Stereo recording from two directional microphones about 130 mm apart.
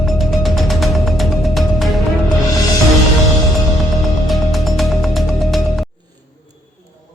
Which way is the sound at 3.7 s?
Centre (ahead or behind).